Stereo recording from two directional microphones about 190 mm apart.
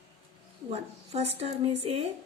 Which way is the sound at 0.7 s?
35° right (ahead or behind).